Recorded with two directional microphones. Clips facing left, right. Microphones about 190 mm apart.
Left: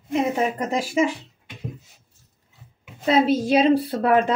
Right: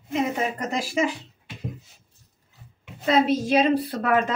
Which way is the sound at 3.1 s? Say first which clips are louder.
Left 2 dB; 30° left (ahead or behind).